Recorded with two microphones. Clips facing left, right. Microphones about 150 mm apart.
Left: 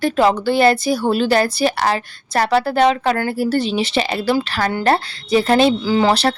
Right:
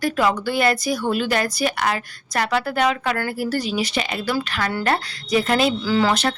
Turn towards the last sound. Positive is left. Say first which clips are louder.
# left 5 dB
turn(degrees=30)  # may be behind; listen again after turning